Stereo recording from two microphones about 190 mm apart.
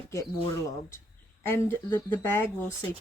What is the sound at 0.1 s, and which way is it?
Speech, 15° left (ahead or behind).